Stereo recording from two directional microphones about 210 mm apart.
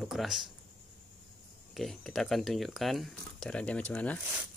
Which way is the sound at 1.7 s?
Centre (ahead or behind).